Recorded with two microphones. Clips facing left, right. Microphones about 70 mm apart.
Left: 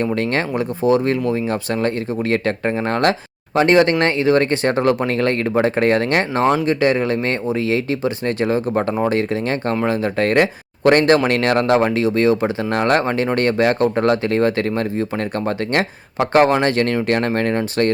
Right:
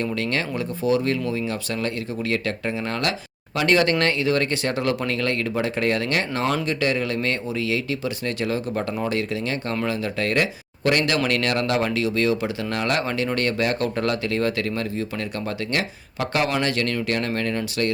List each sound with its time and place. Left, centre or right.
0.0 s speech: left